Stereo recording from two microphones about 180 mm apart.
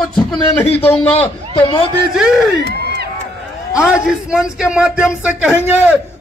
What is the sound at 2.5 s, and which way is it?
Crowd, 65° right (ahead or behind).